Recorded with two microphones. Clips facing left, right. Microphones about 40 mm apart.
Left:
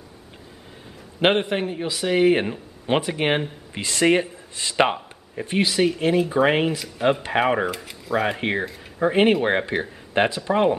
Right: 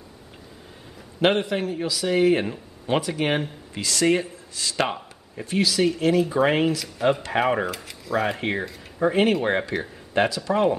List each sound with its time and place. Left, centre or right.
1.2 s speech: left